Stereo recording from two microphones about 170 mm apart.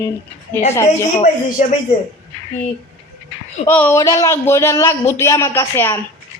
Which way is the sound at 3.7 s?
15° left (ahead or behind).